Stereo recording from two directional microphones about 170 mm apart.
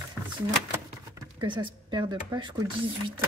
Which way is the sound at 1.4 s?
30° right (ahead or behind).